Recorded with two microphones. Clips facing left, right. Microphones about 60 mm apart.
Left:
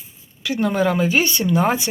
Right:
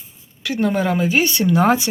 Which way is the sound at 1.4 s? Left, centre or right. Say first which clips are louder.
Right 6 dB; right.